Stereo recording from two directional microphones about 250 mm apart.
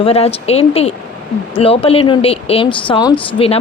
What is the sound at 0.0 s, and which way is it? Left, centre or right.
Speech, left.